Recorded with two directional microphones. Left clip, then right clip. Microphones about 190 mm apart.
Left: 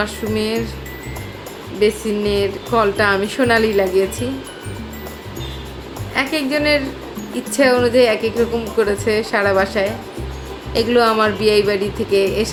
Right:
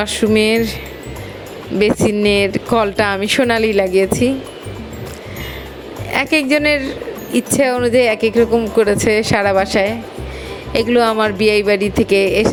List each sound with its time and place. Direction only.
0.0 s speech: 40° right (ahead or behind)
1.8 s speech: 45° right (ahead or behind)
6.1 s speech: 40° right (ahead or behind)